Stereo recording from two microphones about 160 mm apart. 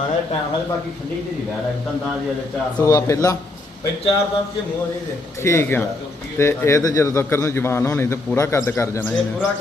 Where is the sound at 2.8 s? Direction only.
20° left (ahead or behind).